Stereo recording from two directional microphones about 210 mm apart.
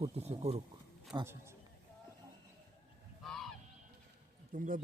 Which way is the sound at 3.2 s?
Centre (ahead or behind).